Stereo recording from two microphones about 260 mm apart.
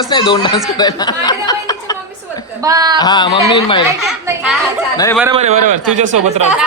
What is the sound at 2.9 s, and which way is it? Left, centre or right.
Speech, centre.